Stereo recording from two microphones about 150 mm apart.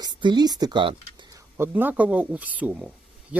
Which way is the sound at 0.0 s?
30° right (ahead or behind).